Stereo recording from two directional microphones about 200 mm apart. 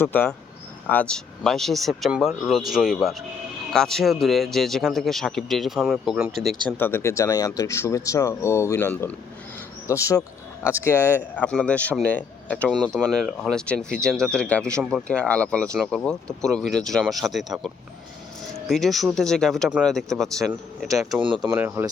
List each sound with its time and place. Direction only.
0.0 s a man's voice: 10° left (ahead or behind)
6.7 s a man's voice: 10° left (ahead or behind)
18.7 s a man's voice: centre (ahead or behind)
21.2 s speech: 25° right (ahead or behind)
21.5 s speech: 10° right (ahead or behind)